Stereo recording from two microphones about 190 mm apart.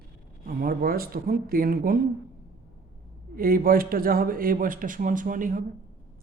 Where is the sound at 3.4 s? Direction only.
50° right (ahead or behind).